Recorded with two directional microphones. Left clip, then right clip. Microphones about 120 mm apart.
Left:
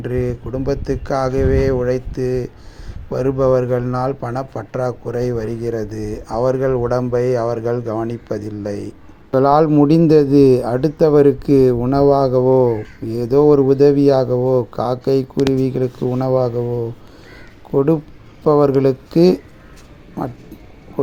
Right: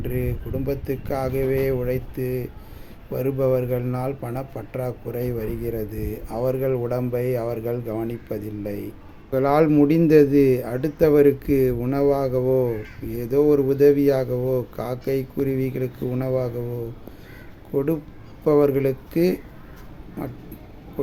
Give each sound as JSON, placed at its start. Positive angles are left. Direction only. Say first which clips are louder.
{"t": 0.0, "sound": "speech", "louder": "left 7 dB", "side_deg": 25}
{"t": 9.3, "sound": "speech", "louder": "left 6 dB", "side_deg": 40}
{"t": 18.4, "sound": "speech", "louder": "left 5 dB", "side_deg": 40}